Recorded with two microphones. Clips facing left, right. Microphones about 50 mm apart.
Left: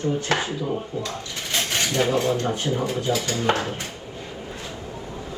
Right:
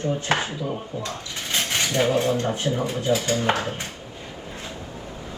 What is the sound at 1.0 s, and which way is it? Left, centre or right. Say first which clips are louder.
Pulleys: even; right.